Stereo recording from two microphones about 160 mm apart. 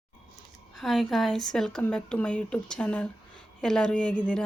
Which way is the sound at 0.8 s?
Centre (ahead or behind).